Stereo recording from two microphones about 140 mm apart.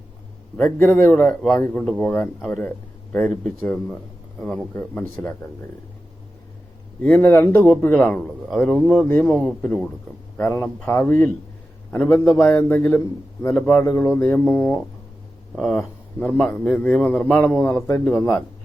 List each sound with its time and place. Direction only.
0.8 s a man's voice: 15° left (ahead or behind)
1.8 s speech: centre (ahead or behind)
2.0 s a man's voice: 10° left (ahead or behind)
7.0 s a man's voice: 15° left (ahead or behind)
15.5 s a man's voice: 5° left (ahead or behind); by 18.3 s 20° left (ahead or behind)